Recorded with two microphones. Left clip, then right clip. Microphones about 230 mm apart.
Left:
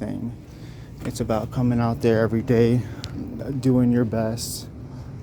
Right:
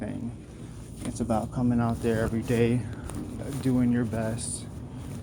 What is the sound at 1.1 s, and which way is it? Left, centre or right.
Speech, left.